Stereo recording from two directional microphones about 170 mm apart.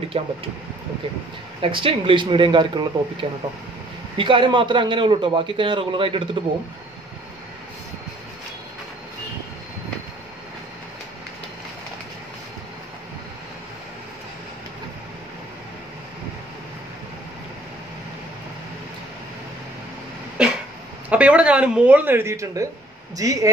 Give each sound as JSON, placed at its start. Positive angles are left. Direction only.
{"t": 0.1, "sound": "speech", "side_deg": -35}
{"t": 1.6, "sound": "a man's voice", "side_deg": -30}
{"t": 20.4, "sound": "cough", "side_deg": -5}
{"t": 21.1, "sound": "a man's voice", "side_deg": -5}